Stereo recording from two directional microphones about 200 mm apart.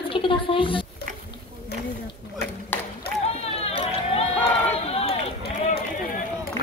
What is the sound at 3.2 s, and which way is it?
Run, 30° left (ahead or behind).